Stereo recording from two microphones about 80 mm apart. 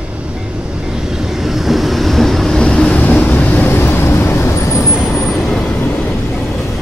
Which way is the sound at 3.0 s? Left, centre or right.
Left.